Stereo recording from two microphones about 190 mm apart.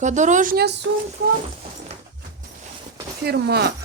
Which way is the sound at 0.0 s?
40° right (ahead or behind).